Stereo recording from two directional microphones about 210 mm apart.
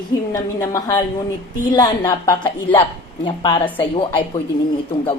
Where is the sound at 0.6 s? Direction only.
15° left (ahead or behind).